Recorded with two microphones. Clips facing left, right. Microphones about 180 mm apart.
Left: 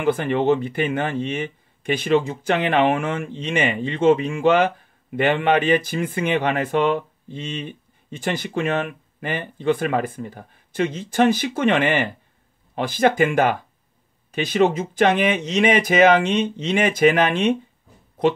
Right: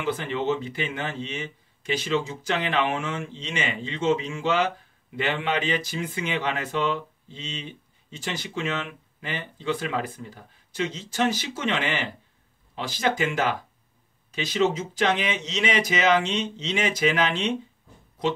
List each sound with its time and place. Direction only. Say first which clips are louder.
0.0 s speech: left 7 dB; 55° left (ahead or behind)